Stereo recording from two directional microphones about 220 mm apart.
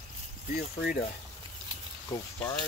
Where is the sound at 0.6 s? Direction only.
40° left (ahead or behind).